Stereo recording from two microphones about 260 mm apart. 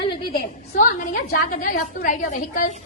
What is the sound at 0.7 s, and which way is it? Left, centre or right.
A woman's voice, left.